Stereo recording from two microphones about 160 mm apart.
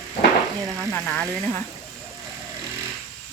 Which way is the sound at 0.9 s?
5° left (ahead or behind).